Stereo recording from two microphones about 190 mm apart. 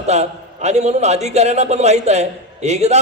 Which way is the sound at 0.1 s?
35° right (ahead or behind).